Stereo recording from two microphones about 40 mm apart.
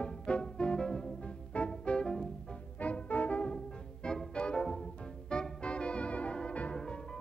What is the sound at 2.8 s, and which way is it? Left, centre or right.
Music, left.